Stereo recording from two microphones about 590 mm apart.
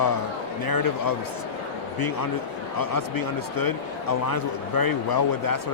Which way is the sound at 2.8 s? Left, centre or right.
Left.